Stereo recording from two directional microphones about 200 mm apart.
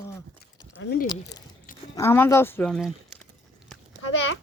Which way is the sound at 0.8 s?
55° left (ahead or behind).